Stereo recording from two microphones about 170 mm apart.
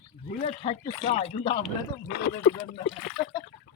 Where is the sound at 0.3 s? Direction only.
35° left (ahead or behind).